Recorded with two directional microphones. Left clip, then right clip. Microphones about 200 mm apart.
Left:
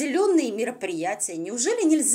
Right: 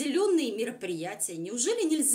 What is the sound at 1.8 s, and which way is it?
Speech, 5° left (ahead or behind).